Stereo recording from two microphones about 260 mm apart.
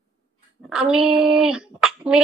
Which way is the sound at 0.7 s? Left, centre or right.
Centre.